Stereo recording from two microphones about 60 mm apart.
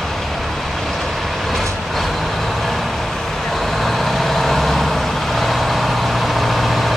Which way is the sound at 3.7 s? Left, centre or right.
Centre.